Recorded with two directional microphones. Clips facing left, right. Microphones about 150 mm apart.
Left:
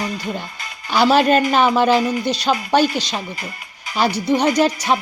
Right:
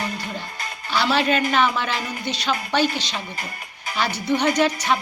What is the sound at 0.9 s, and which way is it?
A woman's voice, 45° left (ahead or behind).